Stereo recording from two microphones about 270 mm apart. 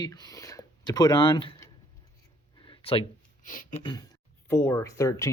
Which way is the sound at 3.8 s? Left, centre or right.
Centre.